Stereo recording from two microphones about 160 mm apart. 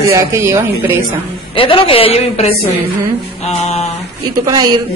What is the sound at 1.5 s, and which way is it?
A woman's voice, 35° left (ahead or behind).